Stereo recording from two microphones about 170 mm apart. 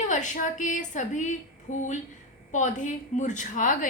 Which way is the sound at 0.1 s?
45° left (ahead or behind).